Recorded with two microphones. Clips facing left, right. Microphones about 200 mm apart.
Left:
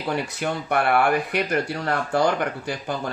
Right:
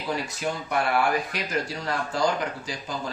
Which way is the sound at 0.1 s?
60° left (ahead or behind).